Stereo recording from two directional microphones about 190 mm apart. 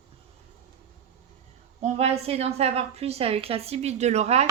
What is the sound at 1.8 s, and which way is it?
A woman's voice, 35° right (ahead or behind).